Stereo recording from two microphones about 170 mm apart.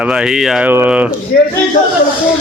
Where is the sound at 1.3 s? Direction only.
65° left (ahead or behind).